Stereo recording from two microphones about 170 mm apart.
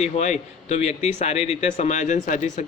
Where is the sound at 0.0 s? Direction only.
45° left (ahead or behind).